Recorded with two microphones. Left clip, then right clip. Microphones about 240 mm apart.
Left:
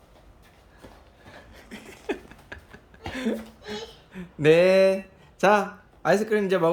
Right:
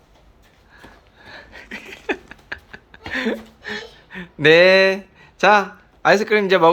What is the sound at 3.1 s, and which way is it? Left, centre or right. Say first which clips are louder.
Speech: right 7 dB; centre.